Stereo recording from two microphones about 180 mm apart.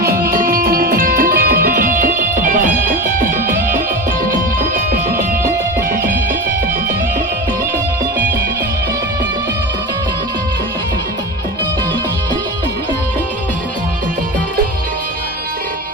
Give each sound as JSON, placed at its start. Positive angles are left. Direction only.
{"t": 0.3, "sound": "music", "side_deg": -50}